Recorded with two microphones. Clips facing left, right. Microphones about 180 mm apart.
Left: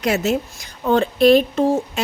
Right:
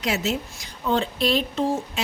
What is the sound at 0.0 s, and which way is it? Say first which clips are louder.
Speech: left 6 dB; 50° left (ahead or behind).